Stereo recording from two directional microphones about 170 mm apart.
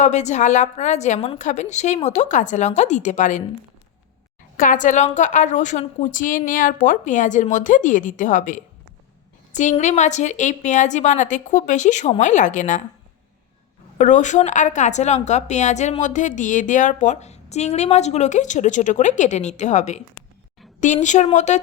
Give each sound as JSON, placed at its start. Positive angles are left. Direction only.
{"t": 0.0, "sound": "a woman's voice", "side_deg": 45}
{"t": 4.5, "sound": "a woman's voice", "side_deg": 50}
{"t": 14.0, "sound": "a woman's voice", "side_deg": 45}